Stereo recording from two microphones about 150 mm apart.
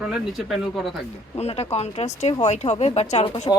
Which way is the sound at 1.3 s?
45° left (ahead or behind).